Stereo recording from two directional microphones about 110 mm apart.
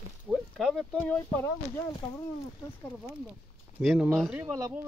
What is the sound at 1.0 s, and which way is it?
Speech, 20° left (ahead or behind).